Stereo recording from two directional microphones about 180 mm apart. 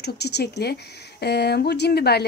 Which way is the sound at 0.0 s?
65° left (ahead or behind).